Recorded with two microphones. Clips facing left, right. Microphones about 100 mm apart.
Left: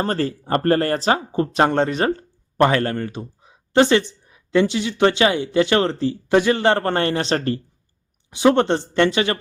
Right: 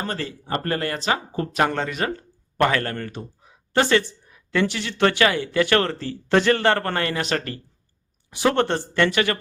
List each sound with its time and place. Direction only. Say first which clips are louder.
0.0 s speech: left 7 dB; 40° left (ahead or behind)
8.3 s speech: left 4 dB; 20° left (ahead or behind)